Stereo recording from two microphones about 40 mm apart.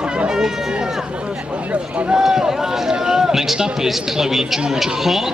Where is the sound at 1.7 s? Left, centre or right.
Right.